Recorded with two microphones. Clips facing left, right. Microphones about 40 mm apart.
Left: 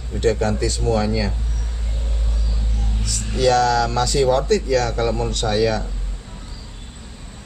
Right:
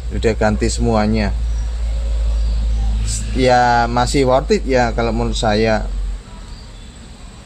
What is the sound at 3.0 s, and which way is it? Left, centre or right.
A man's voice, right.